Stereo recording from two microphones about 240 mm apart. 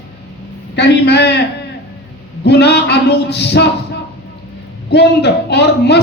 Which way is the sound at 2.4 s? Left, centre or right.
Left.